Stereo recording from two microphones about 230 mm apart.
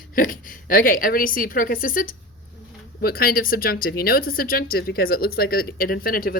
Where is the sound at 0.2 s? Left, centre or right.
Left.